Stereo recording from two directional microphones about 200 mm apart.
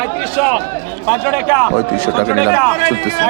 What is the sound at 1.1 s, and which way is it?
A man's voice, 5° left (ahead or behind).